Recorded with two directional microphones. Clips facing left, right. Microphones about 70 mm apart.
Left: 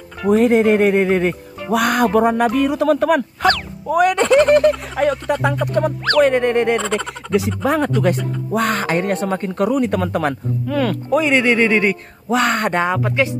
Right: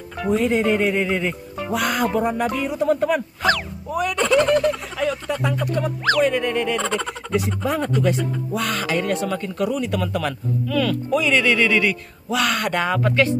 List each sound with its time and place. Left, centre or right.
0.3 s speech: left
6.2 s a sound: left
7.6 s speech: left
8.5 s speech: left; by 13.3 s centre